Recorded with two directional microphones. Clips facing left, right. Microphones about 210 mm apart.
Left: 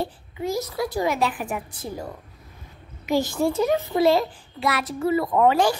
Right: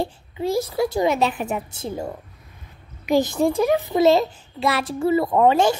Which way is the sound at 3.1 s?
20° right (ahead or behind).